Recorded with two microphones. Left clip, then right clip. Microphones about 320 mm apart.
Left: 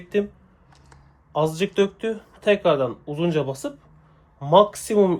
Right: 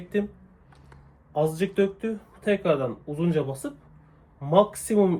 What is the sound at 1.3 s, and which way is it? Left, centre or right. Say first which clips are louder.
Speech: left 3 dB; centre.